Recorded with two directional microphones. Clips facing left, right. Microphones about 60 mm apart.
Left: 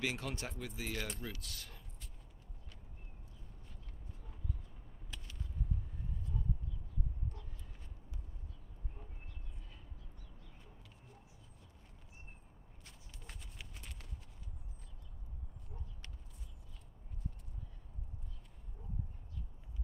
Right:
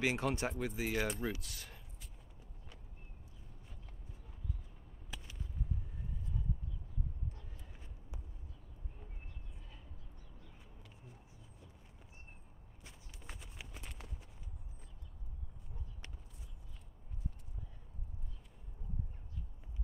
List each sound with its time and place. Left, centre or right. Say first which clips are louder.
0.0 s speech: right 5 dB; right
5.1 s a sound: right 1 dB; centre
12.8 s walk: right 3 dB; centre